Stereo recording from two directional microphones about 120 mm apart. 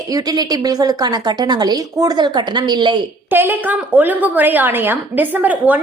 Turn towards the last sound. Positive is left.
turn(degrees=-15)  # may be behind; listen again after turning